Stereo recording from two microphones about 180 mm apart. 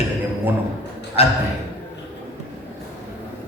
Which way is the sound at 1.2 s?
35° left (ahead or behind).